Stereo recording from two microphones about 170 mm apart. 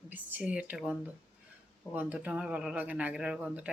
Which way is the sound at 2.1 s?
5° right (ahead or behind).